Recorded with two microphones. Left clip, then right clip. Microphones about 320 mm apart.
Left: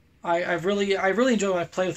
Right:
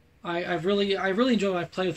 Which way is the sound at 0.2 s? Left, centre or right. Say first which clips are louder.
Left 4 dB; left.